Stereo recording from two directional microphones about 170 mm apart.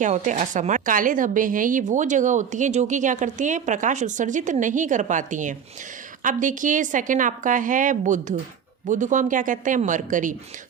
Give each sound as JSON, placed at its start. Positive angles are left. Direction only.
{"t": 0.0, "sound": "a woman's voice", "side_deg": -45}